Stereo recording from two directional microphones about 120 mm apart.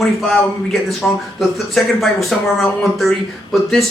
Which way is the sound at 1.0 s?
10° left (ahead or behind).